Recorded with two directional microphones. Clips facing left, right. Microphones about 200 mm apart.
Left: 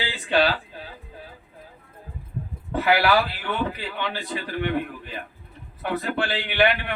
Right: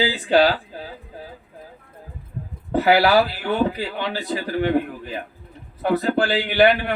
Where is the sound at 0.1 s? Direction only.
40° right (ahead or behind).